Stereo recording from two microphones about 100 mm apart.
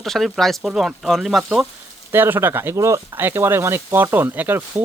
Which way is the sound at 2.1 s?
20° right (ahead or behind).